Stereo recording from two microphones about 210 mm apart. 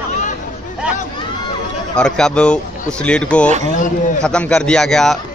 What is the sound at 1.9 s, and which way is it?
A man's voice, 5° left (ahead or behind).